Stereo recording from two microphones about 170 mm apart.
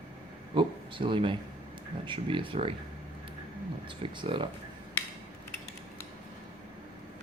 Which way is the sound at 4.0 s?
30° right (ahead or behind).